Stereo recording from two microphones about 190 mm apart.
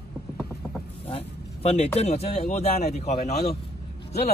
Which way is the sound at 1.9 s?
35° left (ahead or behind).